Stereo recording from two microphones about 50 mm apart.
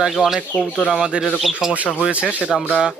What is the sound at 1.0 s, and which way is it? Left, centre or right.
Speech, centre.